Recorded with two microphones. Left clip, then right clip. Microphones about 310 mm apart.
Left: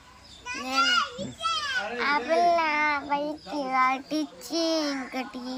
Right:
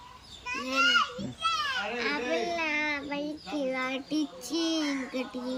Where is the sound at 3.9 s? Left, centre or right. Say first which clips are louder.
Left 4 dB; centre.